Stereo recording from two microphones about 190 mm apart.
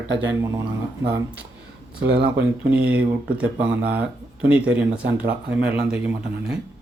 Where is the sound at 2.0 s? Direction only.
60° right (ahead or behind).